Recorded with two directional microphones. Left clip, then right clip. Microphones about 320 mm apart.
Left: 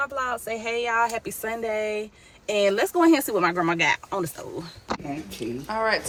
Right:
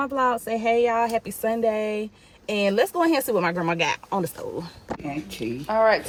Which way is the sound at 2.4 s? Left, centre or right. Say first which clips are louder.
Even; centre.